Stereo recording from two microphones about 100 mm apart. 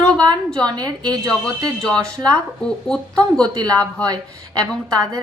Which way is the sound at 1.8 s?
10° left (ahead or behind).